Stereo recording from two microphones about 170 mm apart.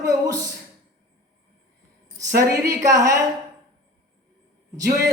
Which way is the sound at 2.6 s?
20° right (ahead or behind).